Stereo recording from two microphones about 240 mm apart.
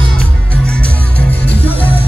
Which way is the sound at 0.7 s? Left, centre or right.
Centre.